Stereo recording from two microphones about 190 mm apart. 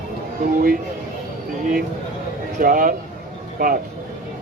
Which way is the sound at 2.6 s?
45° right (ahead or behind).